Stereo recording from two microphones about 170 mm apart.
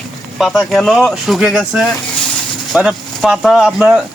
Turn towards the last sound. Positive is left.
turn(degrees=-5)  # may be behind; listen again after turning